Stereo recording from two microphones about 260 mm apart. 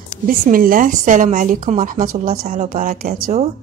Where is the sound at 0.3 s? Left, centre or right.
Right.